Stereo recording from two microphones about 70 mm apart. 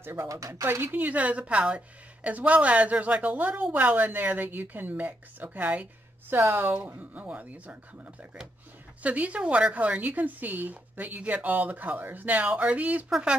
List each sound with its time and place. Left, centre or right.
0.0 s a woman's voice: right
0.7 s speech: right
6.3 s speech: right